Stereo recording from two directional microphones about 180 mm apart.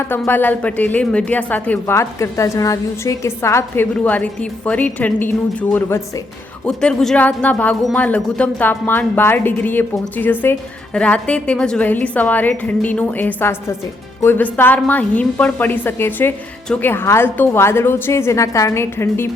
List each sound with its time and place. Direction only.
0.0 s speech: 10° left (ahead or behind)